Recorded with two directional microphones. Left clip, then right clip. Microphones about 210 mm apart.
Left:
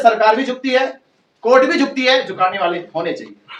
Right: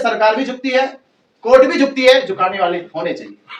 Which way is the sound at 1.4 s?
Centre (ahead or behind).